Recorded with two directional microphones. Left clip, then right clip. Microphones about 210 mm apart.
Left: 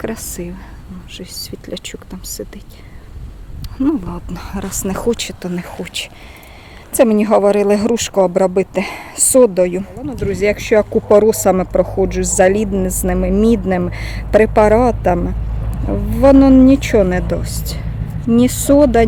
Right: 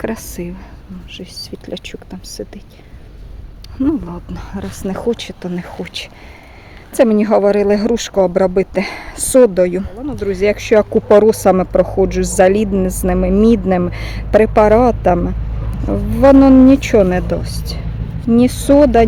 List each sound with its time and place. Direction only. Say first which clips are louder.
0.0 s speech: right 1 dB; 15° right (ahead or behind)
3.8 s speech: even; 5° right (ahead or behind)